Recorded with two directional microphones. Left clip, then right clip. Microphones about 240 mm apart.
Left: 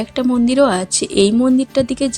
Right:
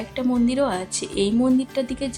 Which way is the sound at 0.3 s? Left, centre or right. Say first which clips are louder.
Left 8 dB; left.